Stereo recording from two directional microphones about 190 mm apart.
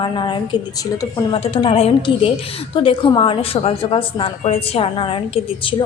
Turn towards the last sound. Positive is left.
turn(degrees=30)  # may be behind; listen again after turning